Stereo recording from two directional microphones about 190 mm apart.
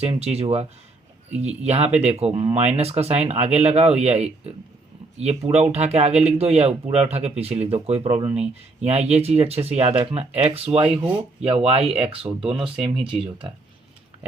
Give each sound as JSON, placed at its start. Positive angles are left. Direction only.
{"t": 0.0, "sound": "speech", "side_deg": -30}
{"t": 10.7, "sound": "speech", "side_deg": -5}
{"t": 11.2, "sound": "speech", "side_deg": -30}